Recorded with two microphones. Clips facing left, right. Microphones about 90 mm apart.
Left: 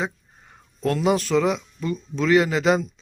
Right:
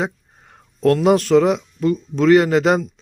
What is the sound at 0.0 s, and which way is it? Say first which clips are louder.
Speech: right 4 dB; 60° right (ahead or behind).